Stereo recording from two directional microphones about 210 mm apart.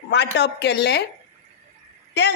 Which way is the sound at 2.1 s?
55° left (ahead or behind).